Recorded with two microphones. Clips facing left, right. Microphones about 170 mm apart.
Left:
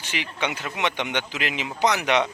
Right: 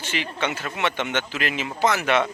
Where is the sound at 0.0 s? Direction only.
15° left (ahead or behind).